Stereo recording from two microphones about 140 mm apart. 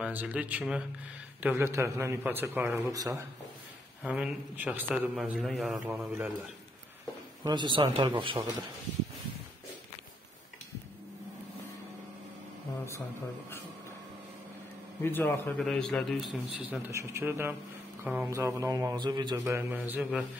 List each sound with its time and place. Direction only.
0.0 s a man's voice: 10° right (ahead or behind)
4.0 s a man's voice: 10° right (ahead or behind)
5.9 s a man's voice: 10° right (ahead or behind)
7.4 s a man's voice: 35° right (ahead or behind)
15.0 s speech: 15° left (ahead or behind)
15.5 s speech: 5° left (ahead or behind)
16.9 s a man's voice: 15° right (ahead or behind)
18.3 s speech: 20° right (ahead or behind)
19.3 s a man's voice: 20° right (ahead or behind)